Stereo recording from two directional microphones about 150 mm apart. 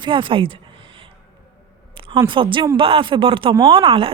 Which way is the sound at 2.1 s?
35° right (ahead or behind).